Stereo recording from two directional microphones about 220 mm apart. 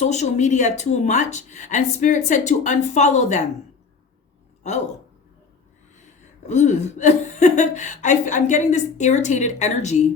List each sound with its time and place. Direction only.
0.0 s speech: 30° left (ahead or behind)
6.4 s speech: 30° left (ahead or behind)